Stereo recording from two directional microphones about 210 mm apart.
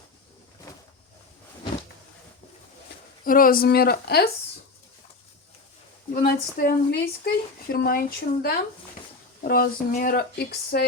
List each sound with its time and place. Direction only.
3.2 s speech: 40° left (ahead or behind)
6.1 s speech: 45° left (ahead or behind)